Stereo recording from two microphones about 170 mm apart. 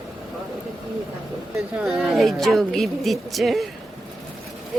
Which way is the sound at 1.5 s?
Centre (ahead or behind).